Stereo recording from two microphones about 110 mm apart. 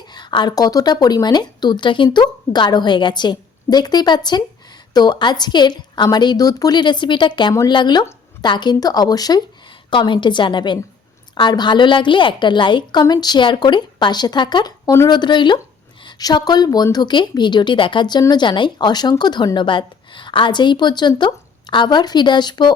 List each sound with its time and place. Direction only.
0.1 s a woman's voice: 40° left (ahead or behind)
9.9 s a woman's voice: 45° left (ahead or behind)